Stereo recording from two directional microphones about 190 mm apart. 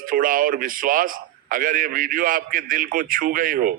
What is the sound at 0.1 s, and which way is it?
A man's voice, 45° right (ahead or behind).